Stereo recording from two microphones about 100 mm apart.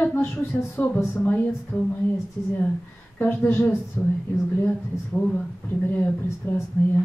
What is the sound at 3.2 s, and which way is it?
Speech, 20° left (ahead or behind).